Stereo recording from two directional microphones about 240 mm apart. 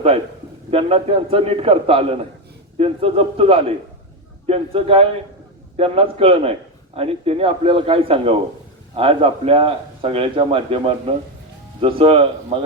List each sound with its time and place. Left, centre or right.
0.7 s a man's voice: right